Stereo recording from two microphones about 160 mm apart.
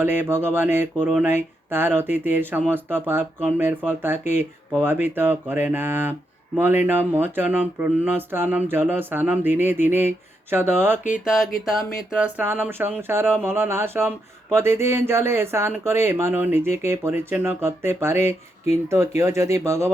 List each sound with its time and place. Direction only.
0.0 s speech: 15° right (ahead or behind)
11.6 s speech: 5° right (ahead or behind); by 19.9 s 20° right (ahead or behind)